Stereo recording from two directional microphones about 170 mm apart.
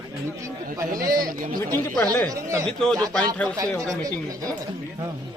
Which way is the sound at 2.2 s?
20° right (ahead or behind).